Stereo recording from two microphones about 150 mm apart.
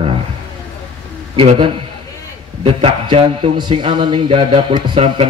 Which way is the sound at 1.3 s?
35° right (ahead or behind).